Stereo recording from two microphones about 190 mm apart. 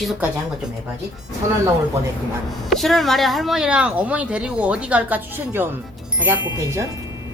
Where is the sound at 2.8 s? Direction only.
Centre (ahead or behind); by 6.9 s 15° right (ahead or behind).